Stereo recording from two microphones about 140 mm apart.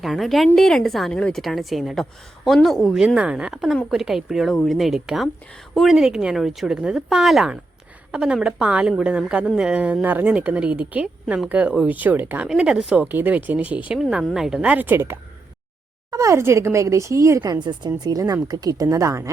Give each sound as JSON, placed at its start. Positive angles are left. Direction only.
{"t": 0.0, "sound": "a woman's voice", "side_deg": 0}